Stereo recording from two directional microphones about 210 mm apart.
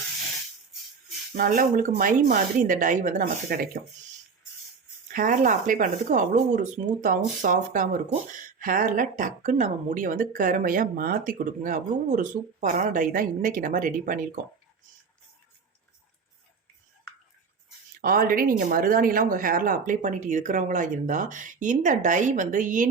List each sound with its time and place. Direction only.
1.4 s speech: 40° right (ahead or behind)
5.1 s speech: 40° right (ahead or behind)
18.0 s speech: 40° right (ahead or behind)